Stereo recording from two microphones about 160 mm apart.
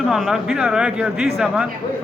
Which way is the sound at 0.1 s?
5° right (ahead or behind).